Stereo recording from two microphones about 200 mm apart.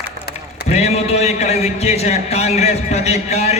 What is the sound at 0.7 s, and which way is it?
A man's voice, 30° left (ahead or behind).